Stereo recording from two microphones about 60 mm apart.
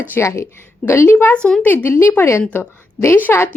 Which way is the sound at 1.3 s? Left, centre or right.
Centre.